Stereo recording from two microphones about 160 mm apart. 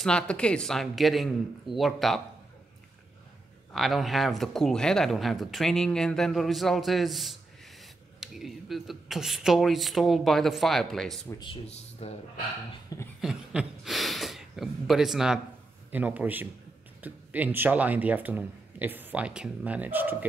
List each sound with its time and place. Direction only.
0.0 s speech: 5° left (ahead or behind)
3.7 s speech: centre (ahead or behind)
11.2 s speech: 30° left (ahead or behind)
13.2 s a man's voice: 5° right (ahead or behind)